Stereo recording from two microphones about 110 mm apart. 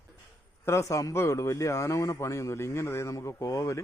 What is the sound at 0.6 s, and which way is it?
A man's voice, 25° left (ahead or behind).